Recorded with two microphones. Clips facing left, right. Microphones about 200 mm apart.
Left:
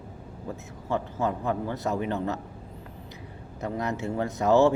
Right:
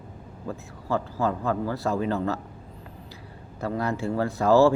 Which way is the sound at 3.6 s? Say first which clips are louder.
Right 2 dB; 20° left (ahead or behind).